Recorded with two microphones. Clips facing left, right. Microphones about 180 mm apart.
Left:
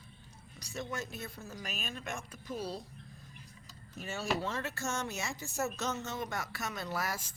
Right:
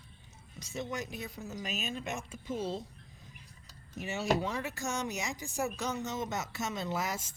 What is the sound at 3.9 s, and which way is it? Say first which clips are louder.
A woman's voice: right 4 dB; 15° right (ahead or behind).